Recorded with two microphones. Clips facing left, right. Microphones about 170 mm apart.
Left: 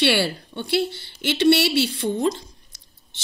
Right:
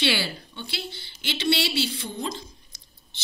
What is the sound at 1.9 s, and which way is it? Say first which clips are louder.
Speech: left 10 dB; 45° left (ahead or behind).